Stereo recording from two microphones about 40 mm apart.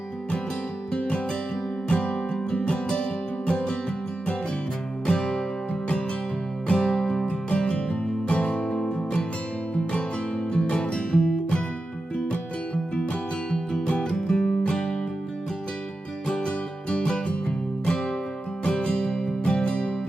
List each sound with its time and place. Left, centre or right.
0.9 s music: left
5.0 s music: centre
6.7 s music: centre
13.8 s music: left
16.2 s music: left